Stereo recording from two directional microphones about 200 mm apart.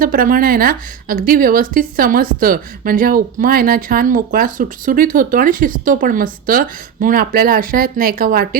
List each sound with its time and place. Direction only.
0.0 s a woman's voice: 45° right (ahead or behind)